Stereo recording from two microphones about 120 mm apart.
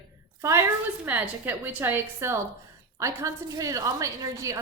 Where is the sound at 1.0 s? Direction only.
15° right (ahead or behind).